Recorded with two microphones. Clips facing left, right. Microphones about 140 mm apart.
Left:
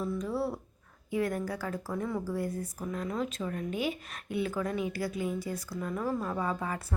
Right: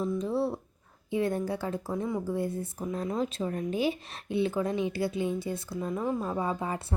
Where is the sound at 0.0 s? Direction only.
25° right (ahead or behind).